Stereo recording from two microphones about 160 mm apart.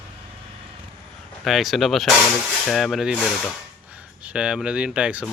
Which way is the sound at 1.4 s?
Centre (ahead or behind).